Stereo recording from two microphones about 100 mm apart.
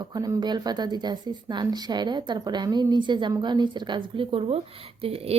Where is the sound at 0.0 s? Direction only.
40° right (ahead or behind).